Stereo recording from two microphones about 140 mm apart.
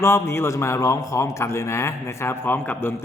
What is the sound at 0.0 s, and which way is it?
A man's voice, 20° left (ahead or behind).